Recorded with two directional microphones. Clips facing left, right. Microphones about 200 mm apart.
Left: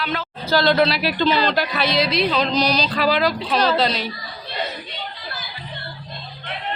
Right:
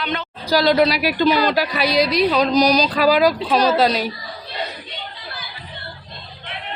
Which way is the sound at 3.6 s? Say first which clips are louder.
Right 3 dB; 40° right (ahead or behind).